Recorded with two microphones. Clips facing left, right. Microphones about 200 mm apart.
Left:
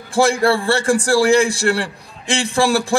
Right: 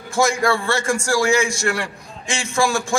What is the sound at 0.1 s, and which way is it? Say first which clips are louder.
A man's voice: left 4 dB; 30° left (ahead or behind).